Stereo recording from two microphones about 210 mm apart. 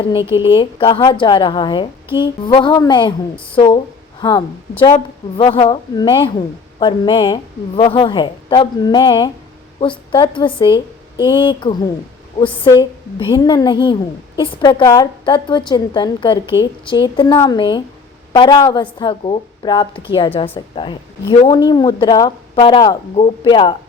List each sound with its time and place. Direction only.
0.4 s a woman's voice: 25° left (ahead or behind)